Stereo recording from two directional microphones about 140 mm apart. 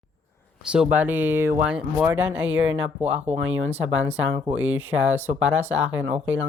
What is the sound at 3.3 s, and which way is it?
Speech, 50° right (ahead or behind).